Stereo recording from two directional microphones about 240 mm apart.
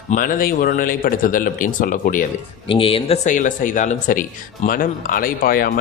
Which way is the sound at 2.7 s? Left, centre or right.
Left.